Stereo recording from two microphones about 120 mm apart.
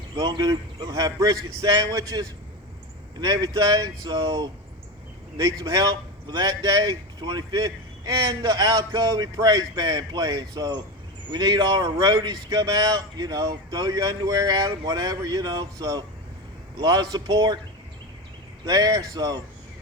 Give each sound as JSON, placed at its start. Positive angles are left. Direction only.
{"t": 0.2, "sound": "a man's voice", "side_deg": -35}
{"t": 18.6, "sound": "a man's voice", "side_deg": -30}